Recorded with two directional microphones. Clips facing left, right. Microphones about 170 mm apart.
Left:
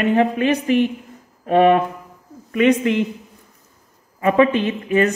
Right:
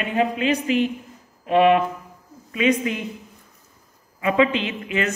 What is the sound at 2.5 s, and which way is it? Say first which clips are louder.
Speech: left 5 dB; 60° left (ahead or behind).